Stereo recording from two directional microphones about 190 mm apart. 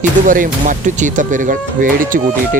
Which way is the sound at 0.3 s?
45° right (ahead or behind).